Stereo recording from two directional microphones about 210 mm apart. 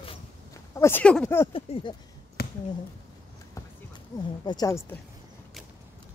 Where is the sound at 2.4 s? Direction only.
45° left (ahead or behind).